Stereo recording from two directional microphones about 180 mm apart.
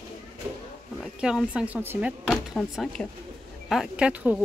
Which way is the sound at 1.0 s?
5° right (ahead or behind).